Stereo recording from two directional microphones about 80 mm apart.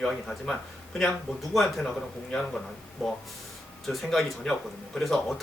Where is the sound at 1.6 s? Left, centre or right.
Centre.